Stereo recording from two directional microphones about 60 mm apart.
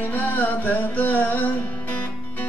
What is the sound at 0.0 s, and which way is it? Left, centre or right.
Music, left.